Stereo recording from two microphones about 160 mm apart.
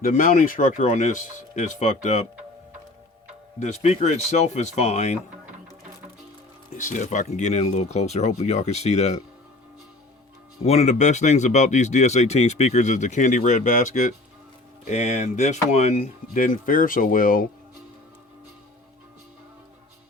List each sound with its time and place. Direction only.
0.0 s speech: 55° left (ahead or behind)
3.6 s speech: 45° left (ahead or behind)
6.7 s speech: 50° left (ahead or behind)
10.6 s speech: 45° left (ahead or behind); by 17.4 s 60° left (ahead or behind)